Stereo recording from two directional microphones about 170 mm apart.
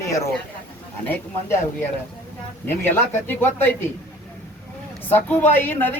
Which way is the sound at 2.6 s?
10° left (ahead or behind).